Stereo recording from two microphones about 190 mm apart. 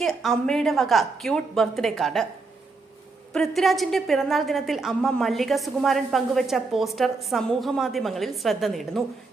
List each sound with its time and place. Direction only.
0.0 s a woman's voice: centre (ahead or behind)
3.3 s a woman's voice: centre (ahead or behind)